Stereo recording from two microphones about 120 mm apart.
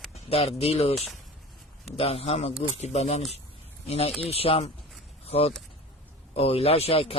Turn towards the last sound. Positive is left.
turn(degrees=55)  # may be behind; listen again after turning